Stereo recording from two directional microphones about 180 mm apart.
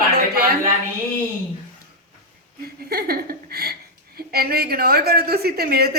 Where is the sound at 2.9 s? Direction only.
60° right (ahead or behind).